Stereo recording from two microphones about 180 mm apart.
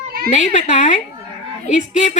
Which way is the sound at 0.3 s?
45° left (ahead or behind).